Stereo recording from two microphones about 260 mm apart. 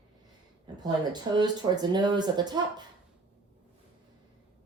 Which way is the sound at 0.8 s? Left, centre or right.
Centre.